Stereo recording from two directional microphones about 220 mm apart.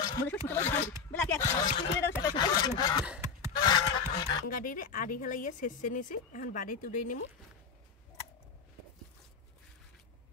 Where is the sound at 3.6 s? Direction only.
20° left (ahead or behind).